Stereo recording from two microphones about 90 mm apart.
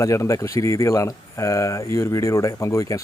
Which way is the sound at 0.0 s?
35° left (ahead or behind).